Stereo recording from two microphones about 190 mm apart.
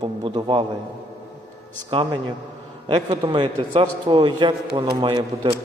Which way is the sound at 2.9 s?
25° right (ahead or behind).